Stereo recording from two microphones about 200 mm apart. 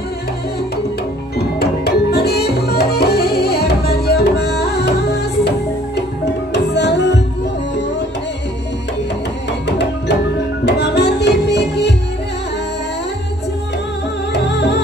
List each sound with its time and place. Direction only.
1.6 s music: 55° left (ahead or behind)
6.5 s music: 60° left (ahead or behind)
9.7 s music: 55° left (ahead or behind)
14.3 s music: 55° left (ahead or behind)